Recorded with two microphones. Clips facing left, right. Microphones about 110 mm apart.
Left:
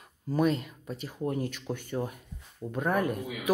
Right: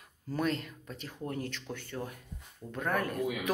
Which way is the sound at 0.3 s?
10° left (ahead or behind).